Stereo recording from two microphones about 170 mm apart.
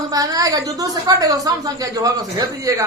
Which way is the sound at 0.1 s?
20° right (ahead or behind).